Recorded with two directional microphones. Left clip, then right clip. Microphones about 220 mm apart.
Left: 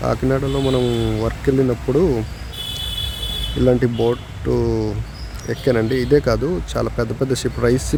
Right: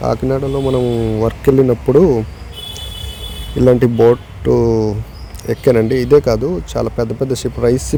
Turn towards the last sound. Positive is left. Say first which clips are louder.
# right 4 dB
turn(degrees=-5)  # may be behind; listen again after turning